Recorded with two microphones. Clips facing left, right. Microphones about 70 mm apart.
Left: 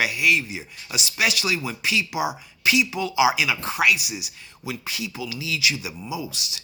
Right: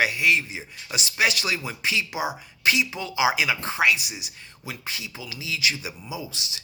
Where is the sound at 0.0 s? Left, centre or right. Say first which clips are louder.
Even; right.